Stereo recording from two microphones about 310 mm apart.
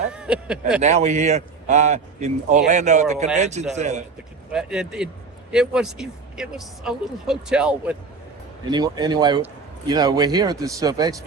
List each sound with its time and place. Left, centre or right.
0.1 s speech: centre
0.8 s a man's voice: right
4.5 s speech: centre
8.7 s a man's voice: centre